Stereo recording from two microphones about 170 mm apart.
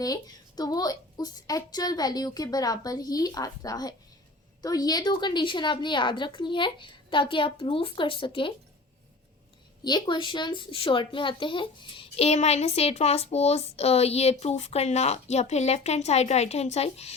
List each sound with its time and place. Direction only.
0.0 s a woman's voice: 20° left (ahead or behind)
9.8 s a woman's voice: 25° left (ahead or behind)